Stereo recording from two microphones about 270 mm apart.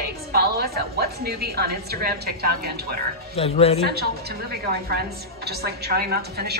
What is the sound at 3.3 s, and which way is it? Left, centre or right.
Speech, left.